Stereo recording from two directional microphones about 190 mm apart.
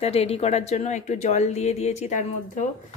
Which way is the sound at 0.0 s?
30° left (ahead or behind).